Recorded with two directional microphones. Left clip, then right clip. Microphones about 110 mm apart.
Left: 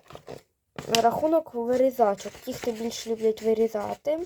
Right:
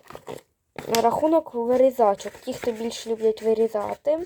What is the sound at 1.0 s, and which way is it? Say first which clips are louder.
Speech: right 3 dB; centre (ahead or behind).